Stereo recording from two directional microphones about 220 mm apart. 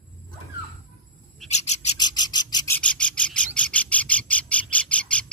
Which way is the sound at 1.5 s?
30° left (ahead or behind).